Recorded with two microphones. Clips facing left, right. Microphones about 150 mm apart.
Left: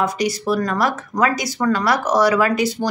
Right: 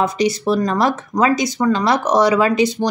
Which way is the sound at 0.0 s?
25° right (ahead or behind).